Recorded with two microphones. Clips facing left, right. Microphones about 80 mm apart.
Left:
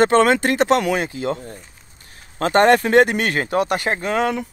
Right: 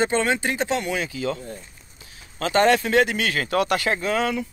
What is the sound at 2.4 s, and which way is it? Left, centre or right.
Speech, left.